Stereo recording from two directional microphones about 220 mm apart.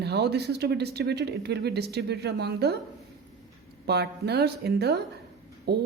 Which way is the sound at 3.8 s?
50° right (ahead or behind).